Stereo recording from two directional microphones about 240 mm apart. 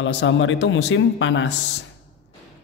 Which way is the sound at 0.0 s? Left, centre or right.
Left.